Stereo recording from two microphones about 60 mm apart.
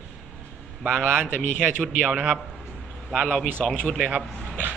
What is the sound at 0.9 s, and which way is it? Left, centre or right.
Speech, right.